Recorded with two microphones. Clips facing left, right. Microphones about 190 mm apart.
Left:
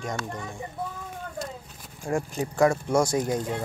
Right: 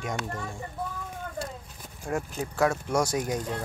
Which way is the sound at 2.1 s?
10° left (ahead or behind).